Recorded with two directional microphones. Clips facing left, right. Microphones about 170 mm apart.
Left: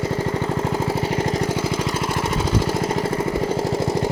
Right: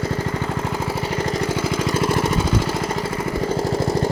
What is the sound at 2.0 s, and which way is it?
Lawn mower, 20° left (ahead or behind).